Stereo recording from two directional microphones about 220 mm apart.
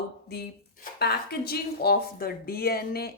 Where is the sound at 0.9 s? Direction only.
45° left (ahead or behind).